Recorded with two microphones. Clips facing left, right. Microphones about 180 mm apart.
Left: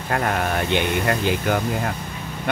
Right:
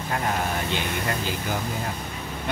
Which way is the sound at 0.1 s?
60° left (ahead or behind).